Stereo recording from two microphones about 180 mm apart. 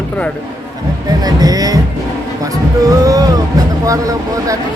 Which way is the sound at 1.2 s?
20° right (ahead or behind).